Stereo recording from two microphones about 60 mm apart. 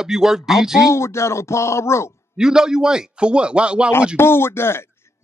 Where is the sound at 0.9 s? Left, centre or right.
Left.